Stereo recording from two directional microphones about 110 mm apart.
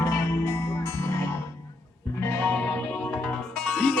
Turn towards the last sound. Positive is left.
turn(degrees=5)  # may be behind; listen again after turning